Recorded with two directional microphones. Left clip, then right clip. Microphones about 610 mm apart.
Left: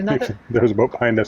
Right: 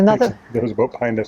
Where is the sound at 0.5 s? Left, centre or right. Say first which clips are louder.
Left 6 dB; centre.